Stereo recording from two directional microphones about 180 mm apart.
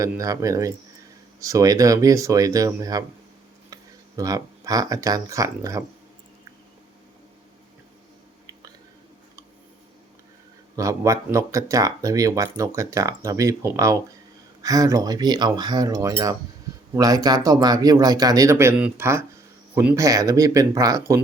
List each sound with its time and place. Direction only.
0.0 s speech: 20° right (ahead or behind)
10.8 s speech: 15° right (ahead or behind)